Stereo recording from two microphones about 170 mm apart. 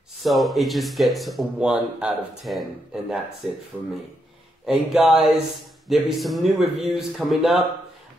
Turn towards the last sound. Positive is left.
turn(degrees=0)  # may be behind; listen again after turning